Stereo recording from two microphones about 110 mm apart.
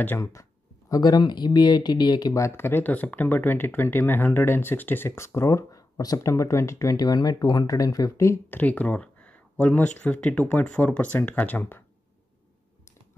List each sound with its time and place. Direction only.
0.2 s speech: 30° left (ahead or behind)